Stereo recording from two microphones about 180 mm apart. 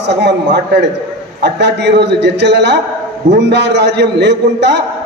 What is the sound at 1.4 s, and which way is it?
A man's voice, 70° right (ahead or behind).